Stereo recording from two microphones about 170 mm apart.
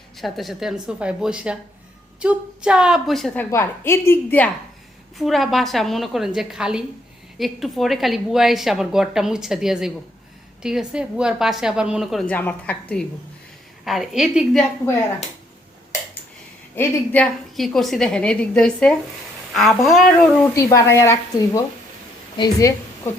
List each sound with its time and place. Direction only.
0.2 s a woman's voice: centre (ahead or behind)
3.5 s speech: 15° left (ahead or behind)
5.1 s a woman's voice: centre (ahead or behind)
12.2 s a woman's voice: 10° left (ahead or behind)
16.7 s speech: 10° left (ahead or behind)
17.6 s a woman's voice: centre (ahead or behind)
20.1 s a woman's voice: 15° left (ahead or behind)